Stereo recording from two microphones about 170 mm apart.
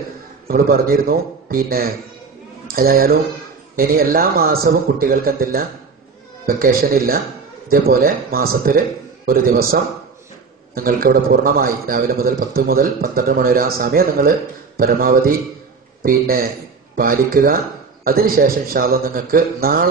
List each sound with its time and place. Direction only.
0.5 s a man's voice: 60° right (ahead or behind)